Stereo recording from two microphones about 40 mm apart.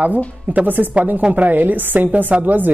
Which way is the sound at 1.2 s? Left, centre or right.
Right.